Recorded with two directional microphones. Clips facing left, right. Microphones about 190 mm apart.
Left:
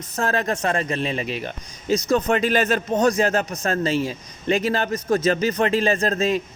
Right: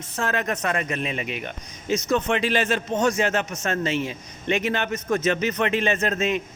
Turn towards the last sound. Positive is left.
turn(degrees=35)  # may be behind; listen again after turning